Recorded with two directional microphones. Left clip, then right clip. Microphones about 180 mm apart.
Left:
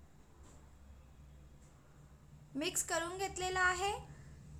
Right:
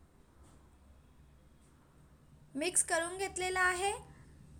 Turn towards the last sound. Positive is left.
turn(degrees=-20)  # may be behind; listen again after turning